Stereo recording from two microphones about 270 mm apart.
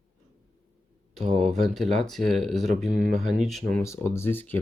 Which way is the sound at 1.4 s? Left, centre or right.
Centre.